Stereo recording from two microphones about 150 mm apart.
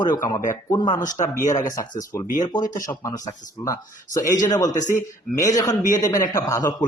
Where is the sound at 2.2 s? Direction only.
55° left (ahead or behind).